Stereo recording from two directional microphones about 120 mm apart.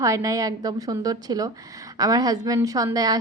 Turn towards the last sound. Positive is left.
turn(degrees=-30)  # may be behind; listen again after turning